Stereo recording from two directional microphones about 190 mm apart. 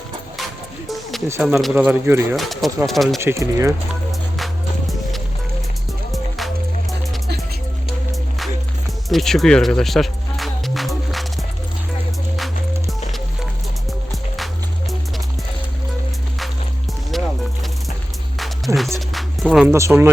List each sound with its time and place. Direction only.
1.3 s speech: 5° right (ahead or behind)
2.3 s speech: centre (ahead or behind)
3.2 s speech: 15° right (ahead or behind)
6.1 s music: centre (ahead or behind)
9.0 s music: centre (ahead or behind)
14.3 s music: centre (ahead or behind)
18.3 s music: centre (ahead or behind)
19.6 s speech: 15° right (ahead or behind)